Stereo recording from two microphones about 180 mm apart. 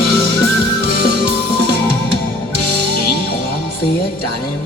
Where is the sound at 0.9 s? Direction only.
55° left (ahead or behind).